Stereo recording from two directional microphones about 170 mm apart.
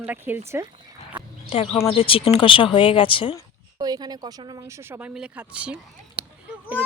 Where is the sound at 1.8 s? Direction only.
30° left (ahead or behind).